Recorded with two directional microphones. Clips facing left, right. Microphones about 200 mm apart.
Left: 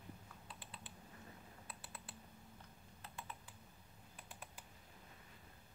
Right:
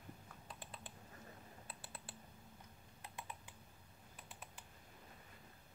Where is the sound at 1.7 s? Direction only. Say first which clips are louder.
Even; 30° right (ahead or behind).